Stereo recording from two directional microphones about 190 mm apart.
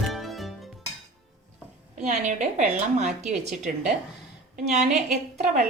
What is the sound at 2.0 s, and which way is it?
Speech, 40° right (ahead or behind).